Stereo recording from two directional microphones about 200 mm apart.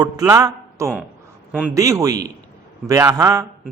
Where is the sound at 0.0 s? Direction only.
15° right (ahead or behind).